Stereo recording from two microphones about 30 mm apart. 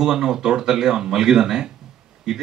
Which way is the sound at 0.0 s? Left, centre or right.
Right.